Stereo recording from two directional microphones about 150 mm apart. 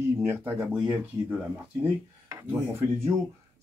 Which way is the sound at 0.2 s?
15° right (ahead or behind).